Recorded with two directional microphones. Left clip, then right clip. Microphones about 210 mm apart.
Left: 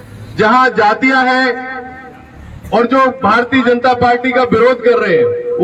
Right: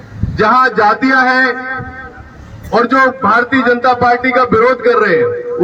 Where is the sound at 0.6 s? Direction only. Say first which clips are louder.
Even; 40° left (ahead or behind).